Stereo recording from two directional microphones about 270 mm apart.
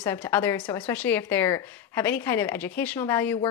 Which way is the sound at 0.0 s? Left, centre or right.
Centre.